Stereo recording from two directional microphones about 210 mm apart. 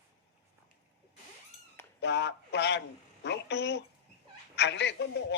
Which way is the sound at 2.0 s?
55° left (ahead or behind).